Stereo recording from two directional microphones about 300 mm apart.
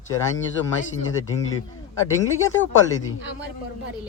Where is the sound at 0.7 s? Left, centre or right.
Left.